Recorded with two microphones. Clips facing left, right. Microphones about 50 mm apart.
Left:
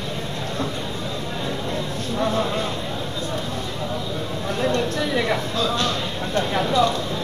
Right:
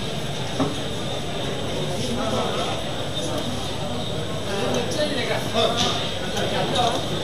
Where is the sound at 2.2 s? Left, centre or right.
Left.